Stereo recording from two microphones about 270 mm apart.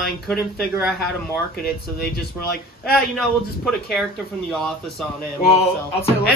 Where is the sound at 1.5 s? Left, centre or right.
Left.